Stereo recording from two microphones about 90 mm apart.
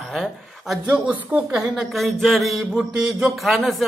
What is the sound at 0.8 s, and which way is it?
A woman's voice, 15° right (ahead or behind).